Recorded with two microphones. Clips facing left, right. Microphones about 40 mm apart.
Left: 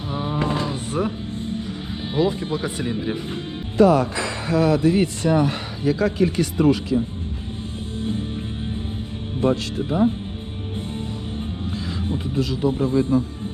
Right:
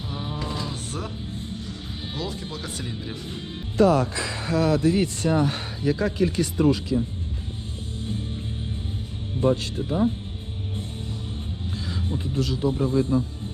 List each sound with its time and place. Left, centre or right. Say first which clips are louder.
0.1 s a sound: left 8 dB; centre
0.3 s music: left 9 dB; left
2.1 s speech: left 12 dB; left
3.8 s speech: left 3 dB; left
5.3 s speech: left 3 dB; left
5.8 s speech: left 3 dB; left
9.4 s speech: left 2 dB; left
12.3 s speech: left 2 dB; left
12.6 s speech: left 3 dB; left